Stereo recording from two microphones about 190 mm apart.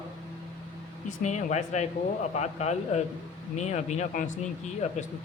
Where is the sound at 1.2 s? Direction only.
40° left (ahead or behind).